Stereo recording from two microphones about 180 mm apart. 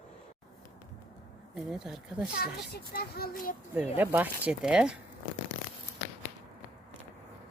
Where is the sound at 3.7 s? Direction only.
10° right (ahead or behind).